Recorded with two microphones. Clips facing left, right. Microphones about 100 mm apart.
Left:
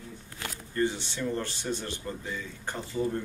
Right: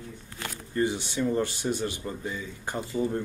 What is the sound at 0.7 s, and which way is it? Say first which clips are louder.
A man's voice: right 2 dB; 15° right (ahead or behind).